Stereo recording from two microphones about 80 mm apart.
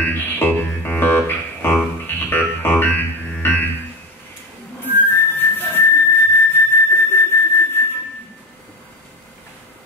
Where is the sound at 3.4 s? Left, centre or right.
Left.